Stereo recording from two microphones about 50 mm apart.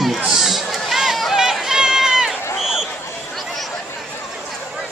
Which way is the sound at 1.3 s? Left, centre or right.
Centre.